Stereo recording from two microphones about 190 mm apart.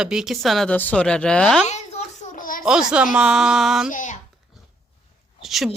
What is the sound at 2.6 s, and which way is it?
A woman's voice, 5° right (ahead or behind).